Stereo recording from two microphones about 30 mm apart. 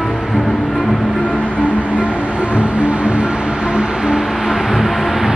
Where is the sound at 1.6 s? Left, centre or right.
Right.